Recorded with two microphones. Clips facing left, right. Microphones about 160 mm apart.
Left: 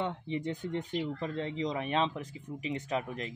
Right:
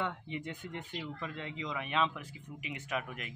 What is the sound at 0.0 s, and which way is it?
Speech, 35° left (ahead or behind).